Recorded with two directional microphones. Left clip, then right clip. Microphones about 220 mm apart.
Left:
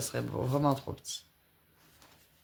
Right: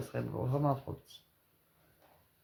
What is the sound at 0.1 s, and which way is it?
Speech, 45° left (ahead or behind).